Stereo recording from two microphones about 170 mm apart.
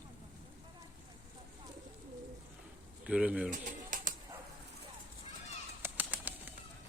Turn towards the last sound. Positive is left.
turn(degrees=-10)  # may be behind; listen again after turning